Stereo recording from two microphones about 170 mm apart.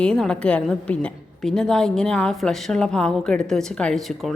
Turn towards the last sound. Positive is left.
turn(degrees=0)  # may be behind; listen again after turning